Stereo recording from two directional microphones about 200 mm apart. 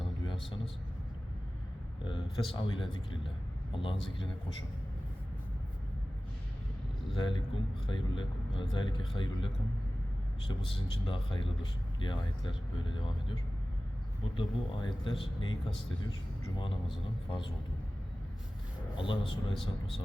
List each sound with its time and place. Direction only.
2.0 s a man's voice: 25° left (ahead or behind)
7.1 s speech: 25° left (ahead or behind)
10.5 s speech: 25° left (ahead or behind)
14.3 s speech: 25° left (ahead or behind)
17.2 s speech: 25° left (ahead or behind)
18.9 s speech: 25° left (ahead or behind)